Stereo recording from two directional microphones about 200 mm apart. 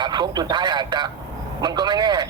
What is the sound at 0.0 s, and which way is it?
Speech, 20° right (ahead or behind).